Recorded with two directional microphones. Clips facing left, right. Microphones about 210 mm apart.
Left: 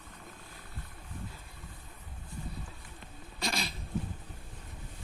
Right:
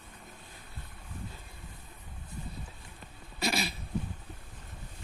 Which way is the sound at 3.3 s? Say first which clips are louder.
Right 4 dB; 5° right (ahead or behind).